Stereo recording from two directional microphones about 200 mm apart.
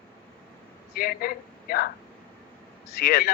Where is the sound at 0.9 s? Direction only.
45° left (ahead or behind).